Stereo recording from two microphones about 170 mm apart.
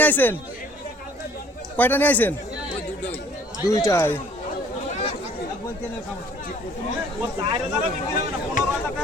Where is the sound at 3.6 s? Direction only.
15° left (ahead or behind).